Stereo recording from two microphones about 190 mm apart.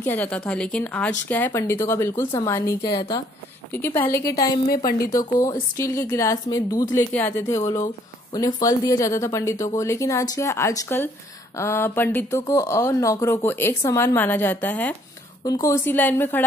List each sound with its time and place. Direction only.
0.0 s speech: 10° left (ahead or behind)